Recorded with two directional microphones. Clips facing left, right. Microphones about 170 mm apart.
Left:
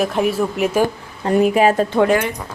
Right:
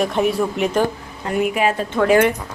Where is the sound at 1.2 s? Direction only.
35° left (ahead or behind).